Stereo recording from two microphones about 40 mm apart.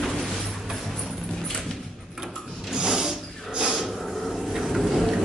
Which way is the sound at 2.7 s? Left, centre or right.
Centre.